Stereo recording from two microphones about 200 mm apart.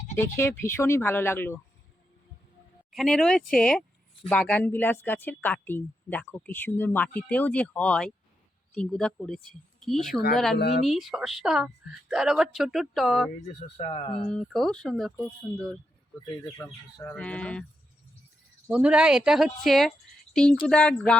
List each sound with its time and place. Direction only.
0.2 s a woman's voice: 10° left (ahead or behind)
2.9 s a woman's voice: centre (ahead or behind)
13.7 s speech: 35° left (ahead or behind)
14.3 s a woman's voice: 5° left (ahead or behind)
16.1 s speech: 20° left (ahead or behind)
16.6 s a woman's voice: 5° left (ahead or behind)
18.7 s a woman's voice: 5° right (ahead or behind)
20.3 s a sound: 5° left (ahead or behind)
20.7 s a woman's voice: 5° left (ahead or behind)